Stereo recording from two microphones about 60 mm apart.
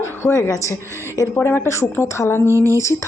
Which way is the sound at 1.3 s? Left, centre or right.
Left.